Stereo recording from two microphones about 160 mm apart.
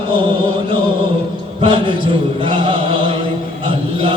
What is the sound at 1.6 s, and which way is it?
Chant, 35° right (ahead or behind).